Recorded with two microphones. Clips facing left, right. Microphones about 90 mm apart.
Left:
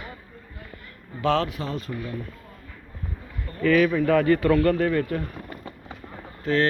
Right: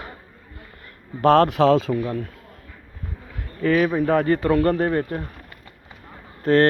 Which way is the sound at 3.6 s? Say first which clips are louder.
Even; 30° right (ahead or behind).